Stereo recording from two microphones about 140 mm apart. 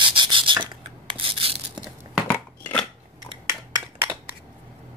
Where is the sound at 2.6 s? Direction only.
10° left (ahead or behind).